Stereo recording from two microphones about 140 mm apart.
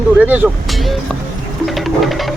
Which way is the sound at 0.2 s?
10° right (ahead or behind).